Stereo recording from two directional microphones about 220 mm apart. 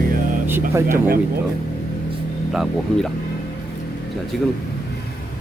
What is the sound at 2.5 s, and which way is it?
Speech, centre (ahead or behind).